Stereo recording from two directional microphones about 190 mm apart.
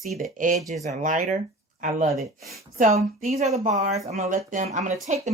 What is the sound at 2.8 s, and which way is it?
Speech, 35° right (ahead or behind).